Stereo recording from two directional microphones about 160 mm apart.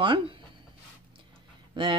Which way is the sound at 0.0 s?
30° right (ahead or behind).